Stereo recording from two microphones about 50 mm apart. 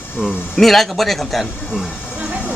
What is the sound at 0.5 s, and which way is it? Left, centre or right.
Speech, centre.